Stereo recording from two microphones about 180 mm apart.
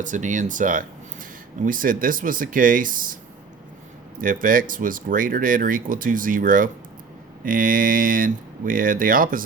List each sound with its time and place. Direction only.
0.0 s speech: 45° right (ahead or behind)
4.2 s speech: 50° right (ahead or behind)